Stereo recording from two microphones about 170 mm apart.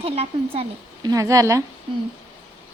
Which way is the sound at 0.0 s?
35° right (ahead or behind).